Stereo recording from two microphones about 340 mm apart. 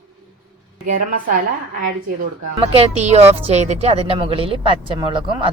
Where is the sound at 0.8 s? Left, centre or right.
Right.